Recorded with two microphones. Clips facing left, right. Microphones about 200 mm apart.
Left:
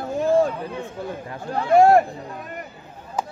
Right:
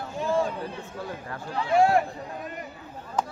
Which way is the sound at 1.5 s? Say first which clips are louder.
Left 7 dB; 45° left (ahead or behind).